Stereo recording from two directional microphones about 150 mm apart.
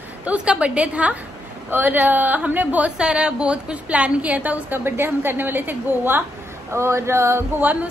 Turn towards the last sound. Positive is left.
turn(degrees=-10)  # may be behind; listen again after turning